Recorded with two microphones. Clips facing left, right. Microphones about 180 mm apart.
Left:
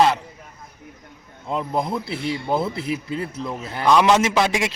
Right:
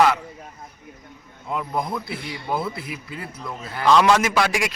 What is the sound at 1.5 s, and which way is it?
A man's voice, 25° left (ahead or behind).